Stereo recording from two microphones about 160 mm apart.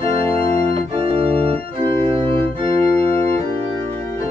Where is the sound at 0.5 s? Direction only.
35° right (ahead or behind).